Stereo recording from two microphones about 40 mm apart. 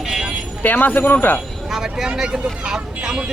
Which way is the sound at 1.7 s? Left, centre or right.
Centre.